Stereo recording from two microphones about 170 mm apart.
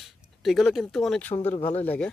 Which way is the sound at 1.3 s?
35° left (ahead or behind).